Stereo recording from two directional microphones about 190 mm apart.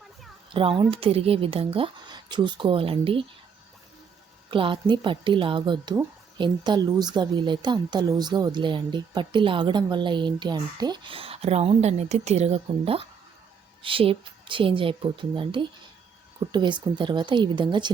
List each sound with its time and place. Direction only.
0.5 s a woman's voice: 30° right (ahead or behind)
4.5 s a woman's voice: 25° right (ahead or behind)